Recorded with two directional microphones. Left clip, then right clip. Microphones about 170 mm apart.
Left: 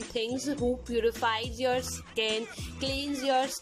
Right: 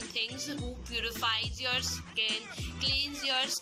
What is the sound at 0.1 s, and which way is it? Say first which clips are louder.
Speech: left 4 dB; 50° left (ahead or behind).